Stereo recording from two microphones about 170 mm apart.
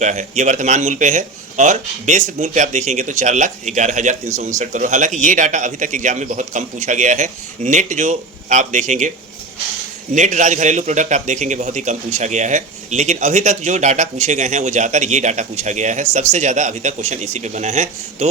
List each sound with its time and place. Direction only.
0.0 s a man's voice: 45° right (ahead or behind)
10.2 s a man's voice: 45° right (ahead or behind)